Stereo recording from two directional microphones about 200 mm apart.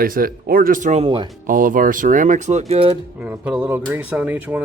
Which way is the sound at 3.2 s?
5° right (ahead or behind).